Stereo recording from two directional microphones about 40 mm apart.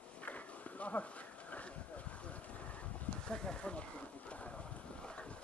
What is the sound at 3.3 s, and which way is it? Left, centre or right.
Boat, left.